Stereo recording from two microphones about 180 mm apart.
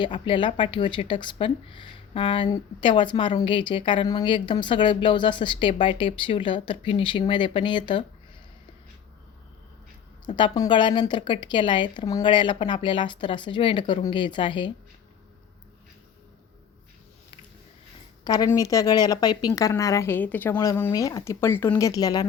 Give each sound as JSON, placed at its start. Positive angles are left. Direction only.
{"t": 0.0, "sound": "speech", "side_deg": 25}
{"t": 10.2, "sound": "speech", "side_deg": 25}
{"t": 18.3, "sound": "speech", "side_deg": 20}